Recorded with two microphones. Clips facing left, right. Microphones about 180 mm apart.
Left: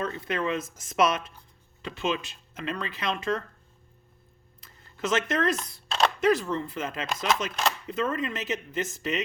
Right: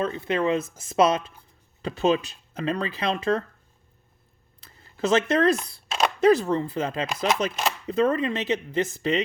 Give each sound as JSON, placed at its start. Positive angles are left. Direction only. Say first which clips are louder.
{"t": 0.0, "sound": "speech", "louder": "right 5 dB", "side_deg": -25}
{"t": 4.6, "sound": "a sound", "louder": "right 5 dB", "side_deg": -30}
{"t": 6.2, "sound": "speech", "louder": "right 9 dB", "side_deg": -35}